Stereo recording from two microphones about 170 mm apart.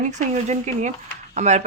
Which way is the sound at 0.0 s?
45° right (ahead or behind).